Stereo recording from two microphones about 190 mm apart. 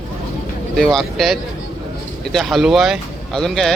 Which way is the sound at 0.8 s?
Centre (ahead or behind).